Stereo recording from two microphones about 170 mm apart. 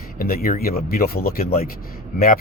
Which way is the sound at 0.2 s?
60° left (ahead or behind).